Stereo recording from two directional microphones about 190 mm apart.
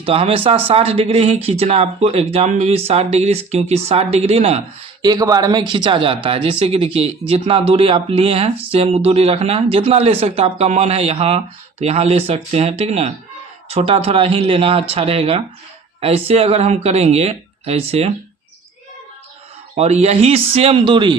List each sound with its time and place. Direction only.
0.0 s speech: 30° right (ahead or behind)
5.0 s speech: 20° right (ahead or behind)
19.7 s speech: 35° right (ahead or behind)